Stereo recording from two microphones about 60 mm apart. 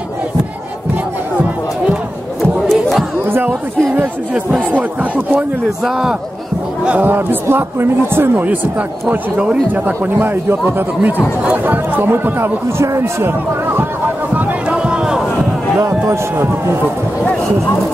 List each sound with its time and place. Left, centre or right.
2.7 s a sound: centre
3.3 s speech: right
5.9 s a man's voice: centre
7.0 s speech: right
9.4 s speech: right
13.2 s speech: right
14.3 s a sound: centre
15.9 s a man's voice: right